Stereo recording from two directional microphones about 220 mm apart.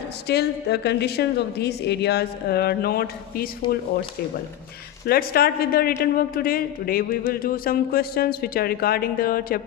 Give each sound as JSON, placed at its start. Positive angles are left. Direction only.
{"t": 0.3, "sound": "a woman's voice", "side_deg": 50}
{"t": 5.0, "sound": "a woman's voice", "side_deg": 45}